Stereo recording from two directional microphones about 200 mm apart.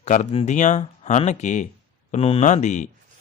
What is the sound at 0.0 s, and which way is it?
Speech, 35° left (ahead or behind).